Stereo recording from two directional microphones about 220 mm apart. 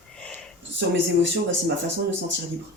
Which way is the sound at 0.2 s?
5° left (ahead or behind).